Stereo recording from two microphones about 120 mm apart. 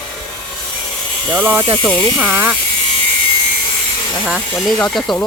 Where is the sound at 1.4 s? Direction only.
15° right (ahead or behind).